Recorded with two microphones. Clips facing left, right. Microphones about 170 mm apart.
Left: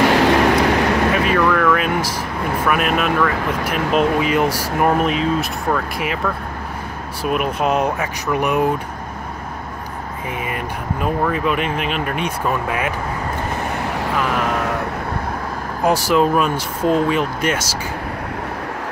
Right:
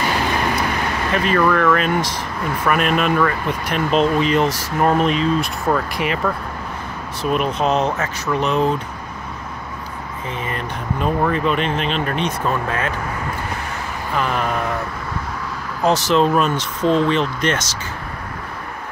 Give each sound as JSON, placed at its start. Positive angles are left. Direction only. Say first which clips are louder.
{"t": 0.0, "sound": "vehicle", "louder": "left 7 dB", "side_deg": 80}
{"t": 1.1, "sound": "speech", "louder": "even", "side_deg": 5}
{"t": 7.2, "sound": "speech", "louder": "even", "side_deg": 10}
{"t": 10.5, "sound": "speech", "louder": "even", "side_deg": 5}
{"t": 14.1, "sound": "vehicle", "louder": "right 1 dB", "side_deg": 5}
{"t": 15.8, "sound": "speech", "louder": "even", "side_deg": 10}